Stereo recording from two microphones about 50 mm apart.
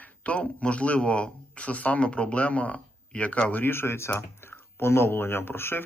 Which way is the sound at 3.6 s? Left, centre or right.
Left.